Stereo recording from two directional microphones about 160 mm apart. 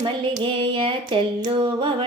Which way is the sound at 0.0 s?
30° right (ahead or behind).